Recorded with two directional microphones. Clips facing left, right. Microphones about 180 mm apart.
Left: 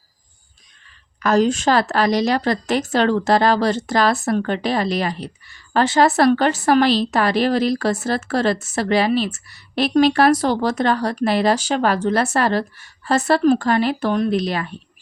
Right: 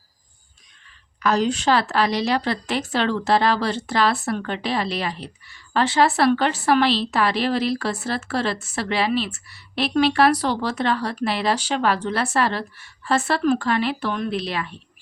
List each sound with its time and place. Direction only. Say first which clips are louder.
1.2 s a woman's voice: left 4 dB; 45° left (ahead or behind)